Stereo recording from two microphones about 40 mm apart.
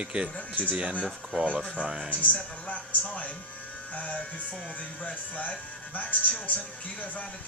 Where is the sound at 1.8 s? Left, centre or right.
Centre.